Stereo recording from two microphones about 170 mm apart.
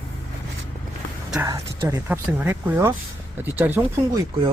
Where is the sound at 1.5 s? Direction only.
15° right (ahead or behind).